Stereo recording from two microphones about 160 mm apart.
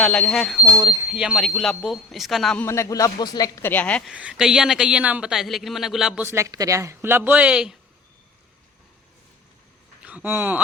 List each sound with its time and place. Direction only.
0.0 s a man's voice: 5° left (ahead or behind)
0.7 s speech: 20° right (ahead or behind)
1.1 s a man's voice: 5° right (ahead or behind)
2.6 s a man's voice: 20° left (ahead or behind)
4.1 s a man's voice: 5° right (ahead or behind)
6.2 s speech: 20° right (ahead or behind)
10.0 s speech: 10° right (ahead or behind)